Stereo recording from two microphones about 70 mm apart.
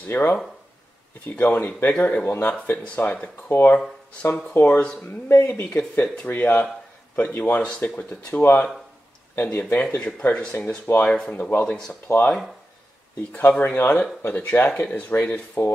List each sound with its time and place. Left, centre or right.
0.1 s speech: left
1.4 s speech: left
3.4 s speech: left
4.6 s speech: centre
5.3 s speech: left
13.3 s speech: left